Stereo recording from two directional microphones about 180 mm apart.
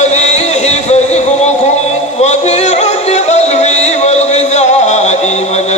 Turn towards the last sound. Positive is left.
turn(degrees=40)  # may be behind; listen again after turning